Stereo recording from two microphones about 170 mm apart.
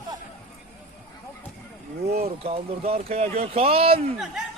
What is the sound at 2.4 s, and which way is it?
Speech, 35° right (ahead or behind).